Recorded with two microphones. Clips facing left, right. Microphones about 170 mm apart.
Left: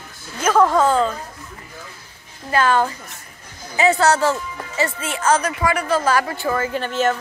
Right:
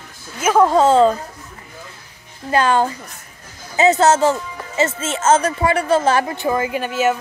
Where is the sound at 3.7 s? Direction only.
20° right (ahead or behind).